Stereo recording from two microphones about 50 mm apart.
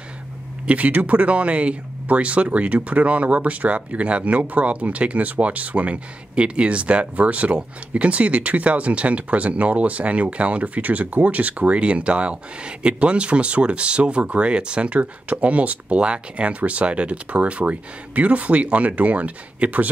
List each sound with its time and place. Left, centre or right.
0.7 s speech: right